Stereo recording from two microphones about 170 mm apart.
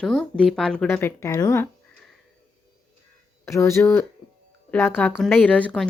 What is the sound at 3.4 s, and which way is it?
Speech, 15° left (ahead or behind).